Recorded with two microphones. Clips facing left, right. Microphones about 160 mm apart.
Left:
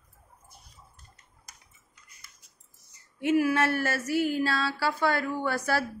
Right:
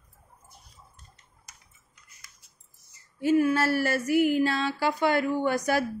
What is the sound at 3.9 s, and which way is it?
A woman's voice, 15° right (ahead or behind).